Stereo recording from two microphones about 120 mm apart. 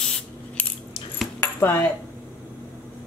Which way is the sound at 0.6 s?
15° left (ahead or behind).